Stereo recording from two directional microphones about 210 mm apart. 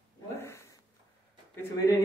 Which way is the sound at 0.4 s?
15° left (ahead or behind).